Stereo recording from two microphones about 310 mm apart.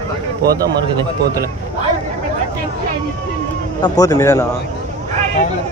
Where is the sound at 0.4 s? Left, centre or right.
Right.